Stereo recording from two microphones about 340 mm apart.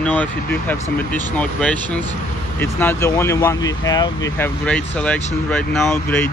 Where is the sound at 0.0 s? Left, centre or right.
Centre.